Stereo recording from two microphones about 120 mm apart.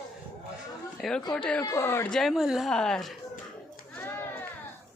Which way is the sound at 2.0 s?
Centre (ahead or behind).